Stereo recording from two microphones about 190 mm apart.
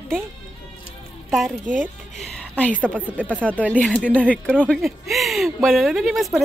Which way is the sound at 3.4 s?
5° left (ahead or behind).